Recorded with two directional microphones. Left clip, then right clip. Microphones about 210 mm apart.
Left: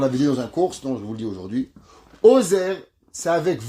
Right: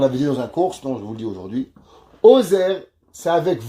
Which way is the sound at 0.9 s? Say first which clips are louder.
Right 2 dB; 45° left (ahead or behind).